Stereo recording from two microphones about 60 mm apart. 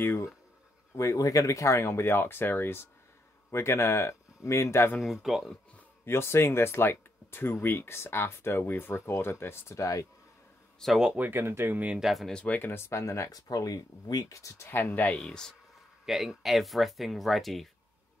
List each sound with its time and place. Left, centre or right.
0.9 s speech: left
5.0 s speech: centre
6.0 s speech: left
9.8 s speech: left
10.8 s speech: centre
11.1 s speech: right
12.0 s speech: centre
12.4 s speech: left
12.7 s speech: left
13.3 s speech: left
14.7 s speech: left
15.0 s speech: centre
16.1 s speech: centre